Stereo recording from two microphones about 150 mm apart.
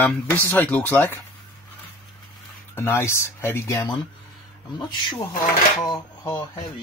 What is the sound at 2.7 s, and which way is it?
Speech, 15° left (ahead or behind).